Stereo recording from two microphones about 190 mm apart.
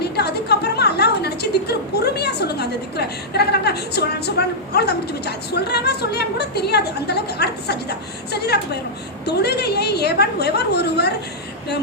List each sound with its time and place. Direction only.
0.0 s a woman's voice: 60° left (ahead or behind)